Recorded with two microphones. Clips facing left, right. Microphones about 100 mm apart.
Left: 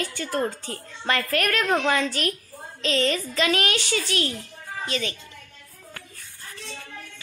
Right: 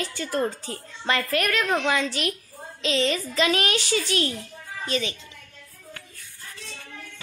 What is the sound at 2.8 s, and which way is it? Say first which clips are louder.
A woman's voice: even; 15° right (ahead or behind).